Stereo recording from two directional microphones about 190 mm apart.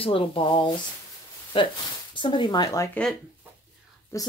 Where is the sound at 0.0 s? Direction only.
30° left (ahead or behind).